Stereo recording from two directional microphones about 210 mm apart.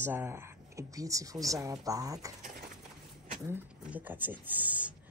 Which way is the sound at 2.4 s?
45° right (ahead or behind).